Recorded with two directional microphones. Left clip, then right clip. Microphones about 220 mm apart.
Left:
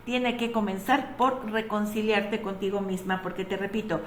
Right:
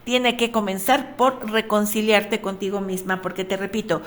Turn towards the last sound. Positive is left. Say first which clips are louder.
# right 6 dB
turn(degrees=-50)  # may be behind; listen again after turning